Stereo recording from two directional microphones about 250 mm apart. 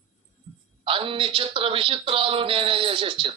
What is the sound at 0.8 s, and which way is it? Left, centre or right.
Speech, right.